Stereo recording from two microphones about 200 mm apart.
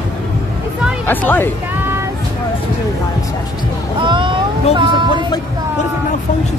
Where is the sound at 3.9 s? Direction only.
25° right (ahead or behind).